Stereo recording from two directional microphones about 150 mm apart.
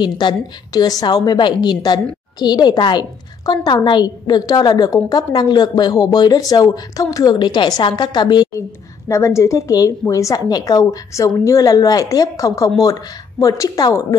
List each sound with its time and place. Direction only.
0.0 s a woman's voice: 30° left (ahead or behind)
9.1 s a woman's voice: 20° left (ahead or behind)